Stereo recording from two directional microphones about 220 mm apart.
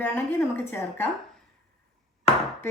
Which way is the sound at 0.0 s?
10° left (ahead or behind).